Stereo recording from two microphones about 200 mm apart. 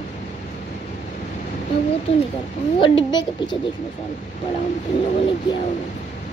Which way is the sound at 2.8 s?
25° left (ahead or behind).